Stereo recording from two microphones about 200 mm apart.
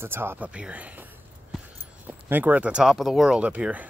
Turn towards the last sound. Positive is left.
turn(degrees=-5)  # may be behind; listen again after turning